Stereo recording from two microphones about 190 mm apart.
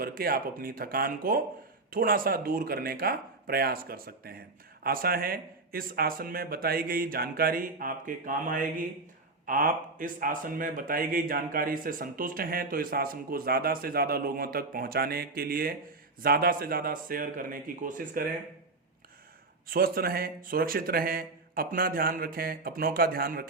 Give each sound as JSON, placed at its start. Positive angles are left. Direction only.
{"t": 0.0, "sound": "speech", "side_deg": -50}
{"t": 19.6, "sound": "speech", "side_deg": -50}